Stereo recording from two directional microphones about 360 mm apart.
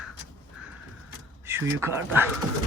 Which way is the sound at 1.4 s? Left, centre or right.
Centre.